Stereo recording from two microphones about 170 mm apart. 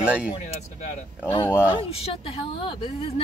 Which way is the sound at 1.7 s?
30° left (ahead or behind).